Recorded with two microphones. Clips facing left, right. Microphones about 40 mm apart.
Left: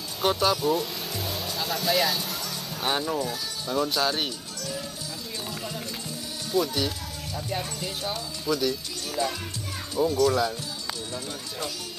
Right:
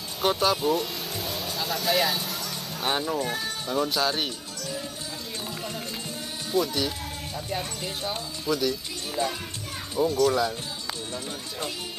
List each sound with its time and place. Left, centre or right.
0.2 s speech: centre
0.7 s vehicle: centre
3.2 s speech: right
3.6 s speech: centre
3.9 s speech: centre
6.5 s speech: centre
9.2 s speech: right
9.9 s speech: centre